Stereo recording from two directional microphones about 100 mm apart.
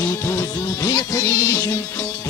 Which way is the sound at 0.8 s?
40° left (ahead or behind).